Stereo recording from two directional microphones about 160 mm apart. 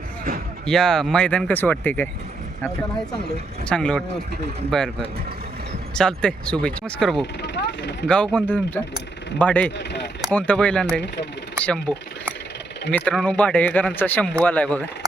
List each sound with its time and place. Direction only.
0.6 s speech: 5° left (ahead or behind)
3.7 s speech: 5° left (ahead or behind)
5.9 s speech: 5° left (ahead or behind)
7.4 s vehicle: 90° left
8.0 s speech: 5° left (ahead or behind)
9.7 s a sound: 90° left
10.3 s speech: 10° left (ahead or behind)